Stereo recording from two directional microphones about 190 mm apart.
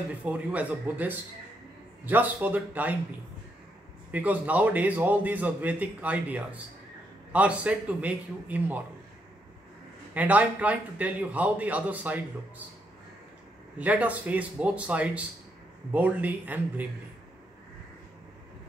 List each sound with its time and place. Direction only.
0.2 s a man's voice: 5° right (ahead or behind)
4.1 s a man's voice: 10° right (ahead or behind)
10.1 s a man's voice: 5° right (ahead or behind)
13.7 s a man's voice: 5° right (ahead or behind)